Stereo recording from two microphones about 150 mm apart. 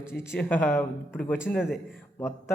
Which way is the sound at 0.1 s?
10° left (ahead or behind).